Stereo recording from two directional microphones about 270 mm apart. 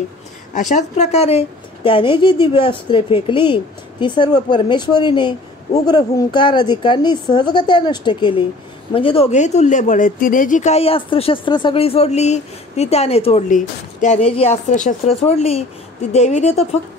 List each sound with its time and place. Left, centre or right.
0.6 s a woman's voice: left